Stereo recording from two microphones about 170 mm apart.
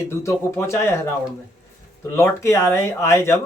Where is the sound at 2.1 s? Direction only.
15° left (ahead or behind).